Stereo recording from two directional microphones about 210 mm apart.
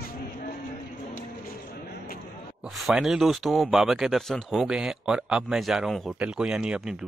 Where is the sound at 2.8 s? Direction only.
Centre (ahead or behind).